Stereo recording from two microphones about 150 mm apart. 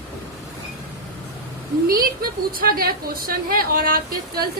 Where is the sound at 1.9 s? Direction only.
75° right (ahead or behind).